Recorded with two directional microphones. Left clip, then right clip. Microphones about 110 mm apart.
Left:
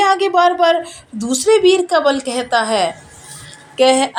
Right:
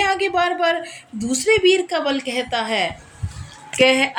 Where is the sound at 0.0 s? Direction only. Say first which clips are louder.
Left 6 dB; 5° left (ahead or behind).